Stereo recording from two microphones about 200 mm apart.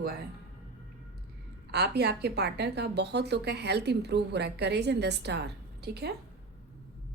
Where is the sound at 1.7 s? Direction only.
55° right (ahead or behind).